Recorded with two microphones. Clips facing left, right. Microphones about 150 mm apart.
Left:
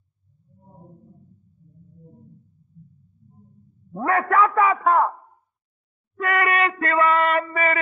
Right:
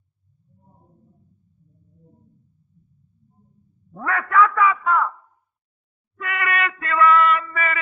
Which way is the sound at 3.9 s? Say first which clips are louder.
Left 2 dB; 35° left (ahead or behind).